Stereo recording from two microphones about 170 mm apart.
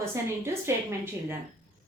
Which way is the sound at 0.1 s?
15° right (ahead or behind).